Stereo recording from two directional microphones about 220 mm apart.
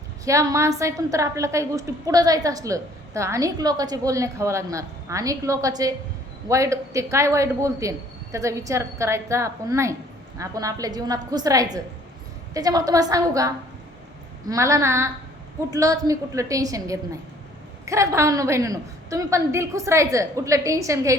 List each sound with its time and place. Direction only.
0.3 s a woman's voice: 15° right (ahead or behind)